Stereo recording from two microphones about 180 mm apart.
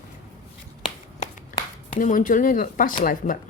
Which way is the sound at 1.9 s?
50° left (ahead or behind).